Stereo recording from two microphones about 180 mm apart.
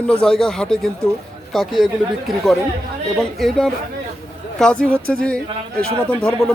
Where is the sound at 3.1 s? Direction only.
Centre (ahead or behind).